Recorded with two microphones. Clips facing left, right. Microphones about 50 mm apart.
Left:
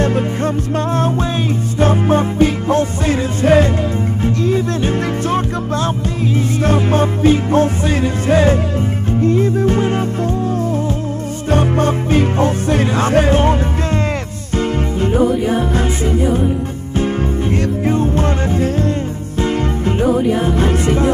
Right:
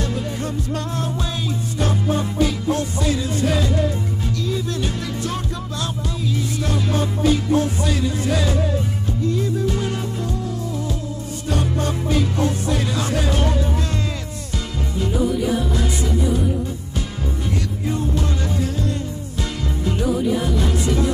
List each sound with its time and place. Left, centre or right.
0.0 s music: left
11.5 s music: left
15.0 s music: left